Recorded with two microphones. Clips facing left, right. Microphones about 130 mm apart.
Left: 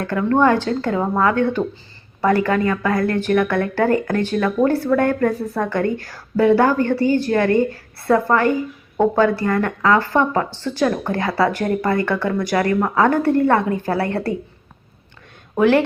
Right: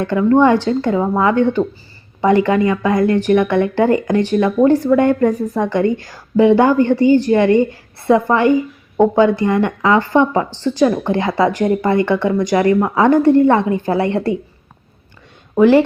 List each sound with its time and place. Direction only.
0.2 s speech: 10° right (ahead or behind)